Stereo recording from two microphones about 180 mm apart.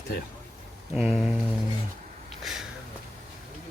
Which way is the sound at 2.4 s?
Centre (ahead or behind).